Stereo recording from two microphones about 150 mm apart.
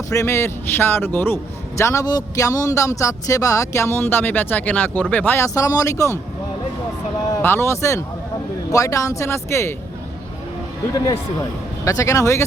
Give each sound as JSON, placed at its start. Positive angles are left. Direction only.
{"t": 0.1, "sound": "a man's voice", "side_deg": 20}
{"t": 7.4, "sound": "a man's voice", "side_deg": 15}
{"t": 11.9, "sound": "a man's voice", "side_deg": 20}